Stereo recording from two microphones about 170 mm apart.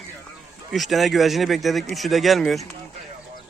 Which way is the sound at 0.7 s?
Centre (ahead or behind).